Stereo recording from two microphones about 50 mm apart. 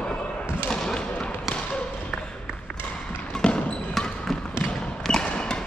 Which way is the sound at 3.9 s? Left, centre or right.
Centre.